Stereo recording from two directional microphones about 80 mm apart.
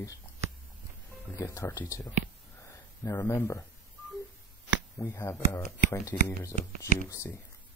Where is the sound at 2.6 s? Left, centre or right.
Left.